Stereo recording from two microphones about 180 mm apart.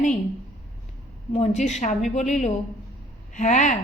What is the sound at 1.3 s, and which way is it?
A woman's voice, 35° left (ahead or behind).